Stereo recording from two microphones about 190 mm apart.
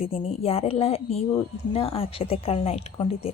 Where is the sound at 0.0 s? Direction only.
30° left (ahead or behind).